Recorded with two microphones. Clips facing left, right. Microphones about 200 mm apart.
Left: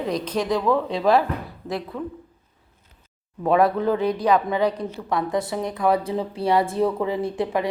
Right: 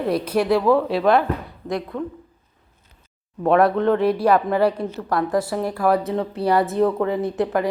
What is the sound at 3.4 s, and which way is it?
A woman's voice, centre (ahead or behind).